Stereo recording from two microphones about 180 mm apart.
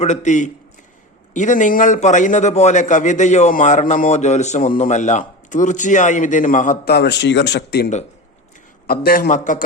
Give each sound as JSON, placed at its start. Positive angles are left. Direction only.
{"t": 0.0, "sound": "a man's voice", "side_deg": 40}
{"t": 8.9, "sound": "a man's voice", "side_deg": 55}